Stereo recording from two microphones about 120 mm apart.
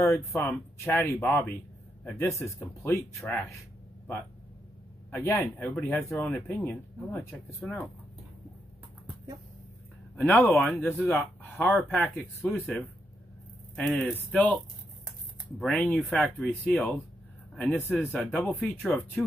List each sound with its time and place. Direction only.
0.0 s speech: 20° left (ahead or behind)
5.1 s speech: 20° left (ahead or behind)
6.2 s speech: 5° left (ahead or behind)
6.5 s speech: 15° left (ahead or behind)
10.1 s speech: 15° left (ahead or behind)
11.1 s speech: centre (ahead or behind)
15.6 s speech: 5° left (ahead or behind)